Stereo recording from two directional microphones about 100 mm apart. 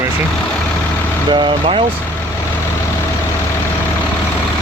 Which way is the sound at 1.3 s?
55° right (ahead or behind).